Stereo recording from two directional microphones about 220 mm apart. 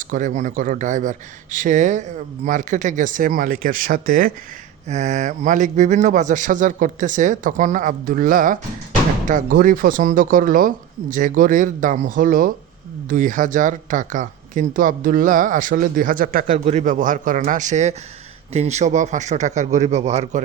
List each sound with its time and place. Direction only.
0.1 s speech: 35° right (ahead or behind)